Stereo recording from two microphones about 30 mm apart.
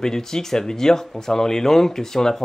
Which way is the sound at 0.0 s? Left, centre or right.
Centre.